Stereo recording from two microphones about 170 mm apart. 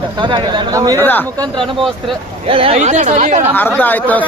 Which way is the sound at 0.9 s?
10° left (ahead or behind).